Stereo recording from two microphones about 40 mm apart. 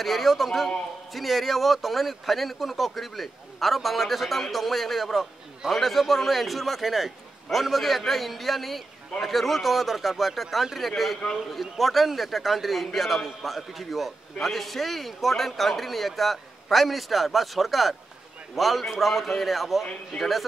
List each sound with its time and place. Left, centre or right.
0.0 s a man's voice: centre